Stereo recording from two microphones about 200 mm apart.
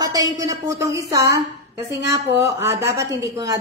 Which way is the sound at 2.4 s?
15° right (ahead or behind).